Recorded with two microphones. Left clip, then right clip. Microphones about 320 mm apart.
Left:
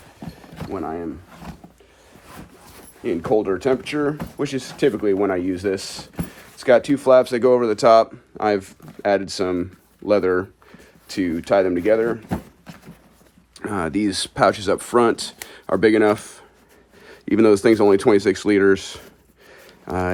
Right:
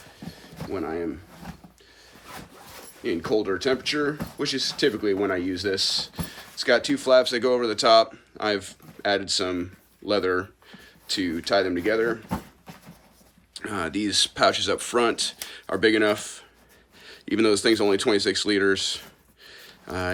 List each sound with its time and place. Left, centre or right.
0.7 s speech: centre
3.0 s speech: centre
13.6 s speech: centre
19.5 s a sound: centre